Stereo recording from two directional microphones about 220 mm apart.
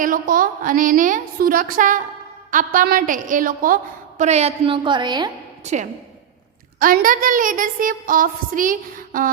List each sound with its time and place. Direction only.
0.0 s a woman's voice: 40° right (ahead or behind); by 5.3 s 20° right (ahead or behind)
5.6 s a woman's voice: 30° right (ahead or behind)